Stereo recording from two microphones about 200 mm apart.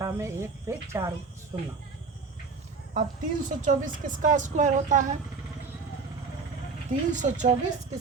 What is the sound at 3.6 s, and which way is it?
A woman's voice, 40° right (ahead or behind).